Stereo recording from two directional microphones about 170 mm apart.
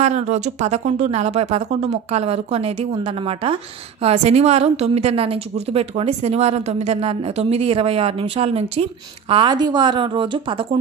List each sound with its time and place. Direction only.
0.0 s a woman's voice: 40° right (ahead or behind)
9.3 s speech: 25° right (ahead or behind)